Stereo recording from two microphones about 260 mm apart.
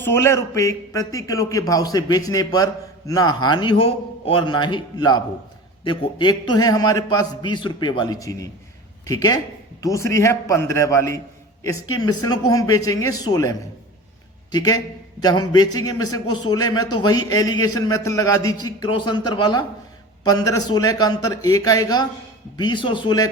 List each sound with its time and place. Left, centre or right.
0.0 s a man's voice: centre